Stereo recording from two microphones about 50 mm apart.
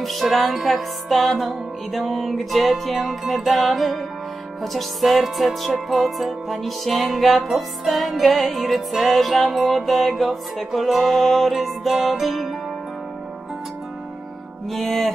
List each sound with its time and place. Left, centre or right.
0.0 s music: centre
14.7 s music: centre